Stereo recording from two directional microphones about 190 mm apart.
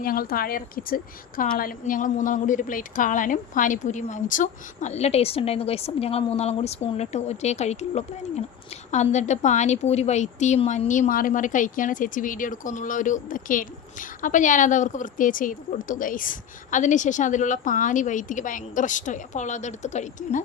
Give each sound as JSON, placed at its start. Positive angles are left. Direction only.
{"t": 0.0, "sound": "a woman's voice", "side_deg": 50}